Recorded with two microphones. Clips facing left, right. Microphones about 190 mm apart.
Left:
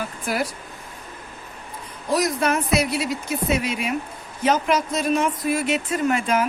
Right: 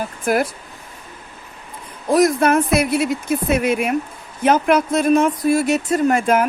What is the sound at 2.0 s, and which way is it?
Speech, 50° right (ahead or behind).